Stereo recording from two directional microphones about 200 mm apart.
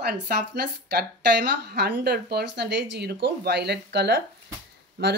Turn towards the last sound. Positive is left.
turn(degrees=-55)  # may be behind; listen again after turning